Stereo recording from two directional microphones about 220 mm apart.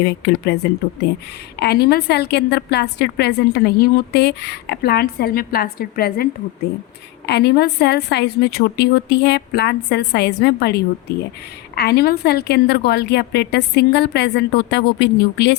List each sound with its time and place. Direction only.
0.0 s a woman's voice: 50° left (ahead or behind)
7.3 s a woman's voice: 50° left (ahead or behind)